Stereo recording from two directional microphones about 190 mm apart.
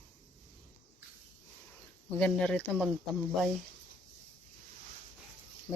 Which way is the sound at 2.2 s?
5° left (ahead or behind).